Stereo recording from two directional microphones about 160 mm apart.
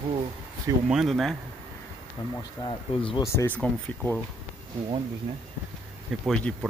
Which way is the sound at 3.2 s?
20° left (ahead or behind).